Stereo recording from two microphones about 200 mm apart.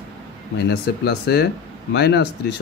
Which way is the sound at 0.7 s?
55° left (ahead or behind).